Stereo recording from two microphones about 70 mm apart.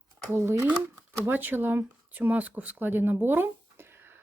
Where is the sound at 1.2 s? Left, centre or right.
Right.